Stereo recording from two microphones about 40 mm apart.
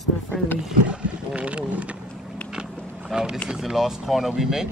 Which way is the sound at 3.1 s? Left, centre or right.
Centre.